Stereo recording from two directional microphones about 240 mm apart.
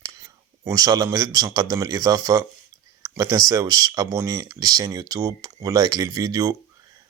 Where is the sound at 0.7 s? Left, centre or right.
Centre.